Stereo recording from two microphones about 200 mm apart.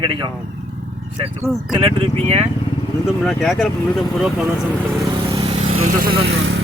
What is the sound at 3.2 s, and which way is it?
Speech, centre (ahead or behind).